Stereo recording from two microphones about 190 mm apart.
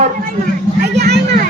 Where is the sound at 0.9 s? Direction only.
60° right (ahead or behind).